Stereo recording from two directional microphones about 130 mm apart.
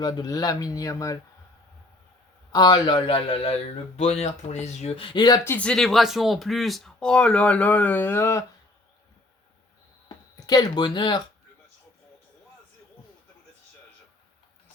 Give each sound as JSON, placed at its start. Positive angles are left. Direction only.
{"t": 0.0, "sound": "speech", "side_deg": 30}
{"t": 2.5, "sound": "a man's voice", "side_deg": 35}
{"t": 5.5, "sound": "speech", "side_deg": 10}
{"t": 10.4, "sound": "speech", "side_deg": 30}